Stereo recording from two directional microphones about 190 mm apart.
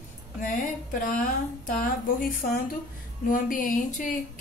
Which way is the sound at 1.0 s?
45° left (ahead or behind).